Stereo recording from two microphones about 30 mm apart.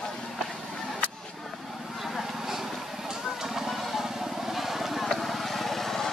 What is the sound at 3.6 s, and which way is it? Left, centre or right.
Vehicle, centre.